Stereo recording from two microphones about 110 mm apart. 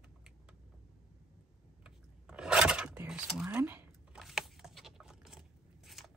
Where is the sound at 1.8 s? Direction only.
10° right (ahead or behind).